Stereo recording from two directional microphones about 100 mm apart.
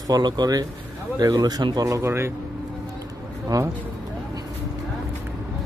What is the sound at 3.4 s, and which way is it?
Speech, 35° right (ahead or behind).